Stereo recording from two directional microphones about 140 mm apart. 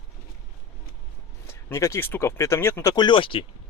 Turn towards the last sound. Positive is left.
turn(degrees=40)  # may be behind; listen again after turning